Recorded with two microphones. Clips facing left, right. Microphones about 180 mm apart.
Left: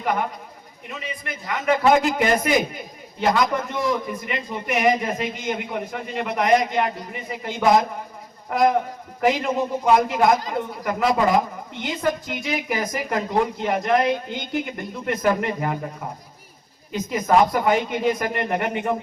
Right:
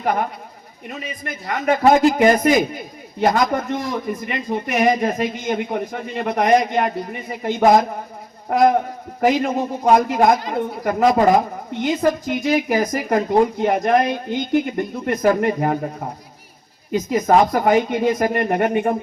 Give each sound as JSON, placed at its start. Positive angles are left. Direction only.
{"t": 0.0, "sound": "a man's voice", "side_deg": -40}